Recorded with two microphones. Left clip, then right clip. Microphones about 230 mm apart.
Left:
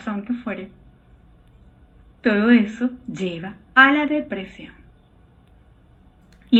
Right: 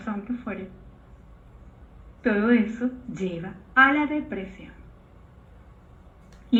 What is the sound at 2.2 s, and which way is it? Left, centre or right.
Speech, left.